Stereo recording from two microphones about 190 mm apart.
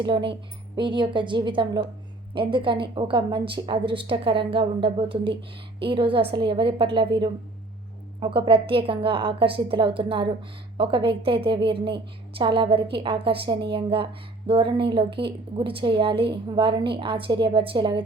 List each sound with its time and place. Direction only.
0.0 s a woman's voice: 25° right (ahead or behind)